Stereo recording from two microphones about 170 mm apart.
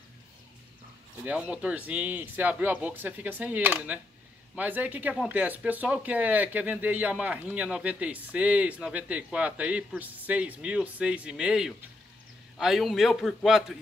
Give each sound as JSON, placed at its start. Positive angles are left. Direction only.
{"t": 1.2, "sound": "a man's voice", "side_deg": -5}